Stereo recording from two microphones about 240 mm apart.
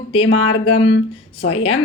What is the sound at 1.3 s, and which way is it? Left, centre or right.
Speech, left.